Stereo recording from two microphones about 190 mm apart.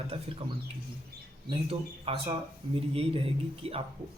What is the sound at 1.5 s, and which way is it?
Speech, 30° right (ahead or behind).